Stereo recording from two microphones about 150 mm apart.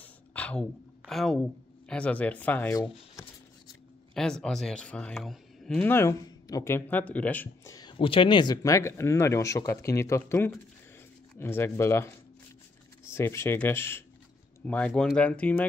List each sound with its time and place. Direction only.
0.0 s speech: 10° left (ahead or behind)
4.1 s speech: 5° left (ahead or behind)
5.9 s speech: 15° left (ahead or behind)
7.7 s speech: 30° left (ahead or behind)
13.1 s speech: 15° left (ahead or behind)